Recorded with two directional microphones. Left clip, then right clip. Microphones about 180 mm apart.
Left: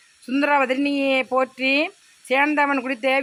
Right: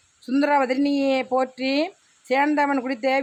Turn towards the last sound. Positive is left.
turn(degrees=-10)  # may be behind; listen again after turning